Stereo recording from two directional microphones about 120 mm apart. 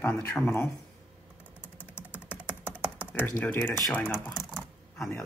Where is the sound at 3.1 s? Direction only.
15° left (ahead or behind).